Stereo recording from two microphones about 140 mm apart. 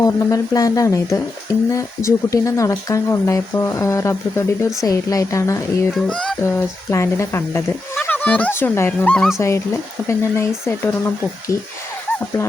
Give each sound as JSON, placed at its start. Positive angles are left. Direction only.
{"t": 0.0, "sound": "speech", "side_deg": 25}
{"t": 5.9, "sound": "a child's voice", "side_deg": 5}
{"t": 6.4, "sound": "speech", "side_deg": 15}
{"t": 10.1, "sound": "speech", "side_deg": 20}